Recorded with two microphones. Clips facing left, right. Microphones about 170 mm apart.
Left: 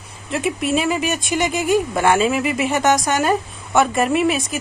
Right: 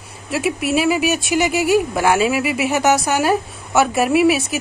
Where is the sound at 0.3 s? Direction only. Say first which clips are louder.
Right 1 dB; 5° right (ahead or behind).